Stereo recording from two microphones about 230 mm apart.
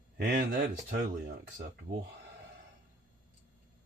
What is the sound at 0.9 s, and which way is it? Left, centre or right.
Speech, right.